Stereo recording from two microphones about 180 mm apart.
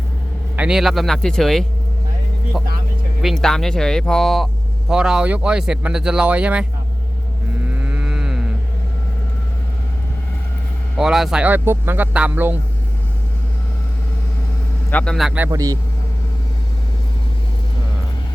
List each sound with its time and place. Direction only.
0.5 s speech: 5° right (ahead or behind)
3.2 s speech: centre (ahead or behind)
7.6 s a sound: 10° right (ahead or behind)
10.9 s speech: centre (ahead or behind)
14.8 s speech: 5° left (ahead or behind)
15.4 s speech: 20° right (ahead or behind)